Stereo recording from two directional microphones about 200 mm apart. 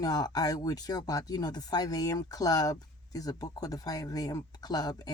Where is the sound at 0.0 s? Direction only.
20° left (ahead or behind).